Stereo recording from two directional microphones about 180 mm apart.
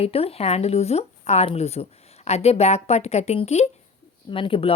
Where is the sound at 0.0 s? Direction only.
35° left (ahead or behind).